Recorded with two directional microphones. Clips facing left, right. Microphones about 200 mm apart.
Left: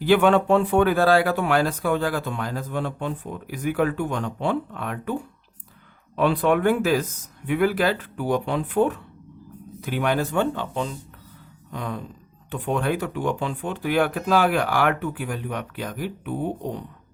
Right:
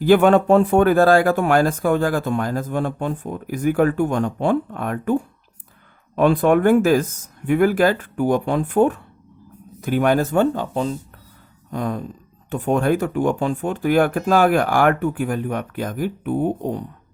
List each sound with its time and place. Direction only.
0.0 s speech: 45° right (ahead or behind)